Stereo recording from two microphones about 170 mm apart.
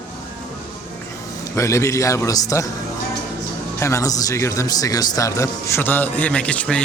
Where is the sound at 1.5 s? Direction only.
15° left (ahead or behind).